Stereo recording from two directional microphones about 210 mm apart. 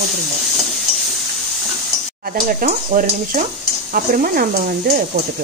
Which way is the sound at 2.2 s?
45° right (ahead or behind).